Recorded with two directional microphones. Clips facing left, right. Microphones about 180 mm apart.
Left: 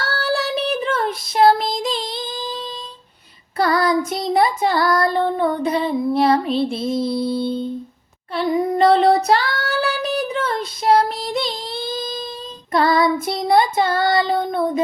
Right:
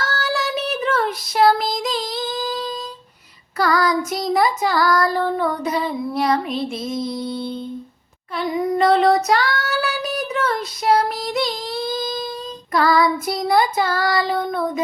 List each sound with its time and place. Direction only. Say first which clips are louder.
0.0 s child singing: left 2 dB; 30° left (ahead or behind)